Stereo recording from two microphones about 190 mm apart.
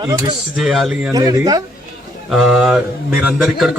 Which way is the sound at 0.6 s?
Centre (ahead or behind).